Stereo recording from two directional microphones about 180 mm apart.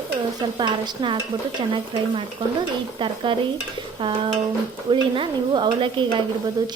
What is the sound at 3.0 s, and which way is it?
A woman's voice, 30° right (ahead or behind).